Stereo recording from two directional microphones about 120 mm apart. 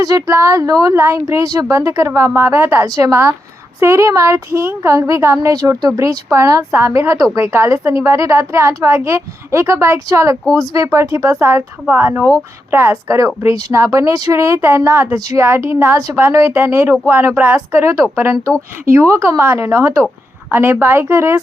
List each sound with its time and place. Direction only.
0.0 s speech: 30° right (ahead or behind)